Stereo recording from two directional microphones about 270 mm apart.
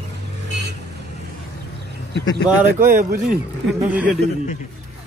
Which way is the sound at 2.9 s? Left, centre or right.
Right.